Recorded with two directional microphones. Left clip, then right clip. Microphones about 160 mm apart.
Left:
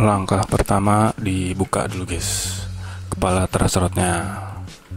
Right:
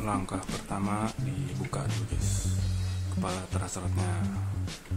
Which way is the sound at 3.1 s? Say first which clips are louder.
Left 15 dB; 55° left (ahead or behind).